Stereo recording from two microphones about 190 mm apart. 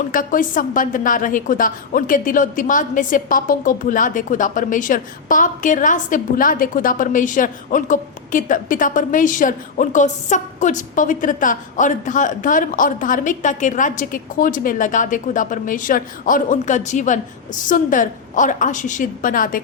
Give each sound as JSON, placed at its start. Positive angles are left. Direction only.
{"t": 0.1, "sound": "a woman's voice", "side_deg": 45}